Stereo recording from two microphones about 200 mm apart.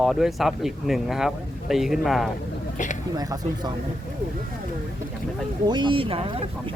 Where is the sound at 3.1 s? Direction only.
20° right (ahead or behind).